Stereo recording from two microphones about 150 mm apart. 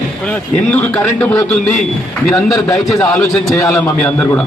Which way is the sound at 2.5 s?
20° left (ahead or behind).